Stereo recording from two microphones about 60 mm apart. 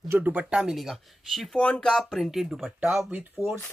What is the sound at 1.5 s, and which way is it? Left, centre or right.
Speech, centre.